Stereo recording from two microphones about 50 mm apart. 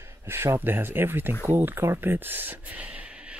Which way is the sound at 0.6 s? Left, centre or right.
Right.